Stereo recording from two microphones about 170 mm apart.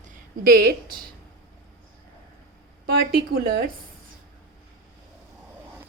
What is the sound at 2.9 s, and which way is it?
Speech, 65° right (ahead or behind).